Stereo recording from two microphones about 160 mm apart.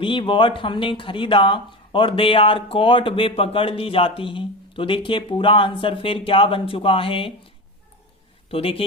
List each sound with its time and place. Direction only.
0.0 s speech: 30° left (ahead or behind)
8.4 s speech: 35° left (ahead or behind)